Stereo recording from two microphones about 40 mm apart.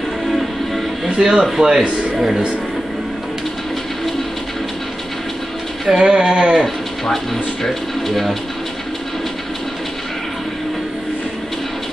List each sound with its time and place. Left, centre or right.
1.0 s music: centre
1.4 s speech: centre
5.9 s speech: right
7.6 s speech: centre